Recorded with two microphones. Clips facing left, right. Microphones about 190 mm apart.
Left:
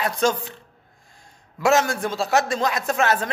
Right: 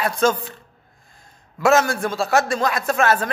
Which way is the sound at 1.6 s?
15° left (ahead or behind).